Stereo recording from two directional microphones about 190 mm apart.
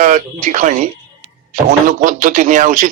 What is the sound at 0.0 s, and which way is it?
Speech, 40° right (ahead or behind).